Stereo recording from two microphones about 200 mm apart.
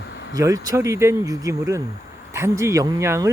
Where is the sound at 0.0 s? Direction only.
60° left (ahead or behind).